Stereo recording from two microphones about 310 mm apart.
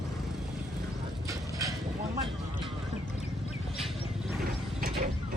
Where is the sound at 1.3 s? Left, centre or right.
Centre.